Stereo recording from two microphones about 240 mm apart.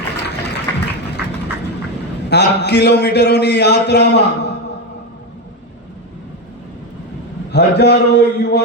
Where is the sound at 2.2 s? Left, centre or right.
Left.